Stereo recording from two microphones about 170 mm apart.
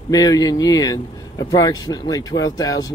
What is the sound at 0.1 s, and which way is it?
Speech, 20° left (ahead or behind).